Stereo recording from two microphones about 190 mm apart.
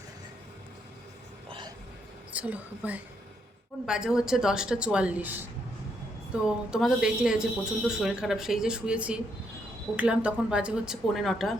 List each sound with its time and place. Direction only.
1.5 s hiccup: 25° right (ahead or behind)
2.3 s a woman's voice: 10° right (ahead or behind)